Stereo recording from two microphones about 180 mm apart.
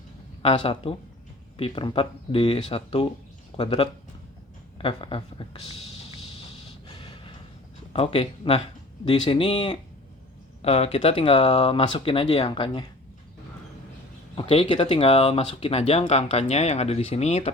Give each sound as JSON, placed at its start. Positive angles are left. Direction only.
{"t": 0.4, "sound": "speech", "side_deg": 30}
{"t": 6.8, "sound": "a sound", "side_deg": 30}
{"t": 7.9, "sound": "speech", "side_deg": 30}
{"t": 14.3, "sound": "speech", "side_deg": 30}